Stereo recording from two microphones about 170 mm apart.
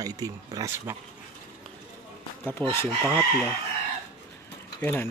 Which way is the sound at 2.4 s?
10° left (ahead or behind).